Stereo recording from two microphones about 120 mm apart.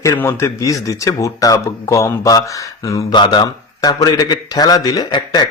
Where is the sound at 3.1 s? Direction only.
40° left (ahead or behind).